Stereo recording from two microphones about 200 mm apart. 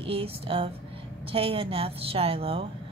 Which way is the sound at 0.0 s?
25° right (ahead or behind).